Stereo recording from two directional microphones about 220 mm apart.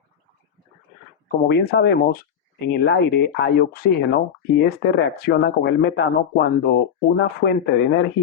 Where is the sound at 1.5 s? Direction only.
50° left (ahead or behind).